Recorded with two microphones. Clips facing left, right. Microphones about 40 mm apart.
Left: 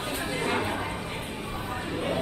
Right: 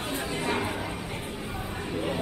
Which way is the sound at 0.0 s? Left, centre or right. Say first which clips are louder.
Left 1 dB; left.